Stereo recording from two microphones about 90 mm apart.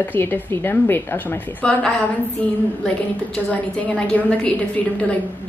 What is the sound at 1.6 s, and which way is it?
Speech, 10° left (ahead or behind).